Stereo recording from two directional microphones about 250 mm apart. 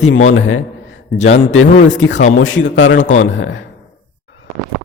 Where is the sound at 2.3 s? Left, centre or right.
Left.